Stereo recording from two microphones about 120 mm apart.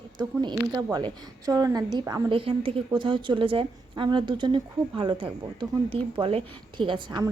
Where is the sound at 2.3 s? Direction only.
50° right (ahead or behind).